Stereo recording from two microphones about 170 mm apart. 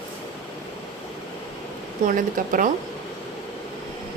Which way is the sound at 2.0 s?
50° right (ahead or behind).